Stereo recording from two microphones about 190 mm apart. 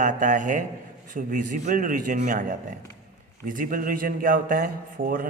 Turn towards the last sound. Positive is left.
turn(degrees=-45)  # may be behind; listen again after turning